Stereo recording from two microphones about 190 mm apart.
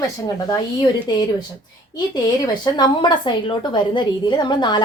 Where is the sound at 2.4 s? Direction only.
20° left (ahead or behind).